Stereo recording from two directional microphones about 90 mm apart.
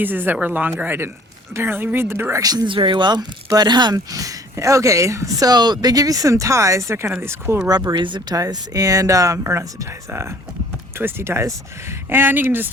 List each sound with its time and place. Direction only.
0.0 s speech: 20° right (ahead or behind)
2.4 s speech: 45° right (ahead or behind)
2.6 s speech: 70° right (ahead or behind); by 3.9 s 55° right (ahead or behind)
3.9 s speech: 40° right (ahead or behind)
7.9 s speech: 65° right (ahead or behind)
8.4 s speech: 40° right (ahead or behind); by 12.7 s 25° right (ahead or behind)